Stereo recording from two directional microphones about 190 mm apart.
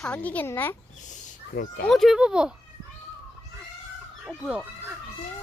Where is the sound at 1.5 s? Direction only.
50° left (ahead or behind).